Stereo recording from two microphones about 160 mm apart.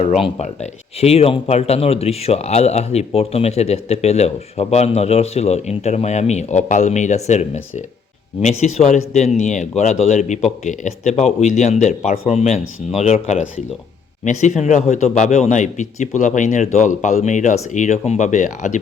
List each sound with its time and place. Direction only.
0.0 s speech: 40° left (ahead or behind)